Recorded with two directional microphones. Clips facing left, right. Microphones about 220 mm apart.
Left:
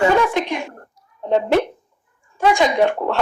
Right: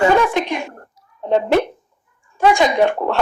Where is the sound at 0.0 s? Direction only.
50° right (ahead or behind).